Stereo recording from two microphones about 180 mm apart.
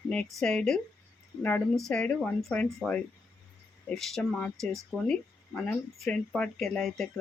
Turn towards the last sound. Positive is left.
turn(degrees=0)  # may be behind; listen again after turning